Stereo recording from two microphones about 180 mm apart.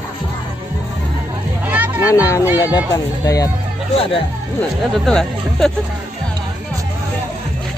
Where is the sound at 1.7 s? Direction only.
10° right (ahead or behind).